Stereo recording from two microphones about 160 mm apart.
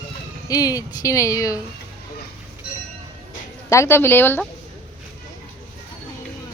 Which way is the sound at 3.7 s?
15° left (ahead or behind).